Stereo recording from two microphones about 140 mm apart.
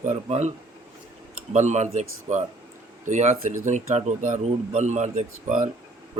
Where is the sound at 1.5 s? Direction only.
55° right (ahead or behind).